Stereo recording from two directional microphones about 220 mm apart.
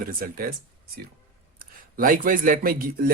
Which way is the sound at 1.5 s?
40° right (ahead or behind).